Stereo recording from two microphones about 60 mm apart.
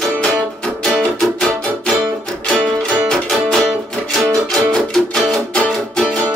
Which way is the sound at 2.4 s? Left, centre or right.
Centre.